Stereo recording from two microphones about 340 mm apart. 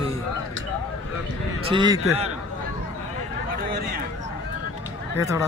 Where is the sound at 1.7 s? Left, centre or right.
Centre.